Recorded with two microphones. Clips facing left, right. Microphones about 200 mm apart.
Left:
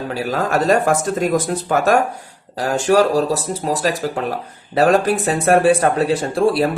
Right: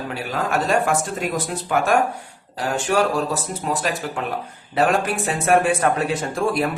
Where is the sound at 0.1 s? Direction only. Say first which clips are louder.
Left 5 dB; 40° left (ahead or behind).